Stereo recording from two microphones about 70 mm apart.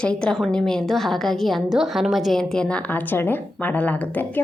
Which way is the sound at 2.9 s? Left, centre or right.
Left.